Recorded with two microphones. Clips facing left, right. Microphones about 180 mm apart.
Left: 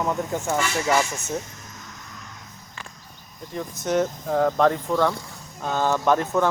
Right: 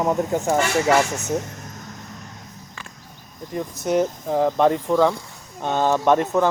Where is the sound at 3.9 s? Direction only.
10° right (ahead or behind).